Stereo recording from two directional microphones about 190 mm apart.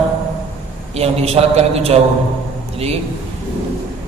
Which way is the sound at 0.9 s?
35° right (ahead or behind).